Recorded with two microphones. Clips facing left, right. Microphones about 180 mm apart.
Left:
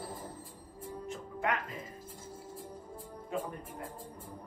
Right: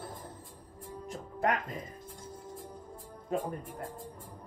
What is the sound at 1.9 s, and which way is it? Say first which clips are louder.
Music: right 1 dB; 5° left (ahead or behind).